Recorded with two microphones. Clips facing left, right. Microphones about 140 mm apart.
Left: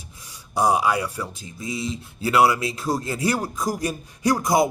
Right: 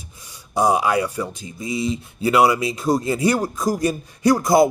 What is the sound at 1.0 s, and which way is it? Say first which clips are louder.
Speech: right 5 dB; 15° right (ahead or behind).